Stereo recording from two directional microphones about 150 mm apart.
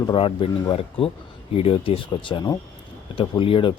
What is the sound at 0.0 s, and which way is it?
Speech, 30° left (ahead or behind).